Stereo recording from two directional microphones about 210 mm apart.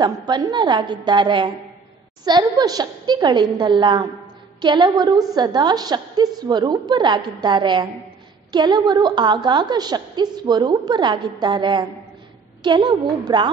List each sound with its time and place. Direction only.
0.3 s a woman's voice: 20° right (ahead or behind)